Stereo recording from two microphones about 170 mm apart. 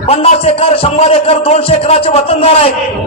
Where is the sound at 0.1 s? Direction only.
35° left (ahead or behind).